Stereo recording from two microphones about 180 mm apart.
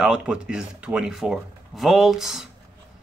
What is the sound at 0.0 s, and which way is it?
Speech, 5° right (ahead or behind).